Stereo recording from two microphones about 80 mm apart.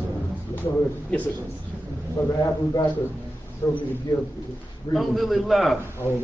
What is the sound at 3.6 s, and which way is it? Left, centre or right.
Speech, left.